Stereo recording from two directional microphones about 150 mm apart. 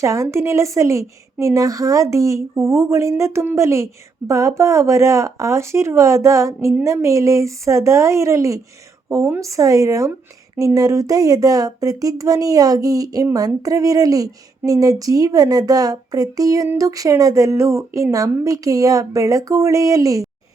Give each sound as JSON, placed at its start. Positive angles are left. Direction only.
{"t": 0.0, "sound": "speech", "side_deg": -20}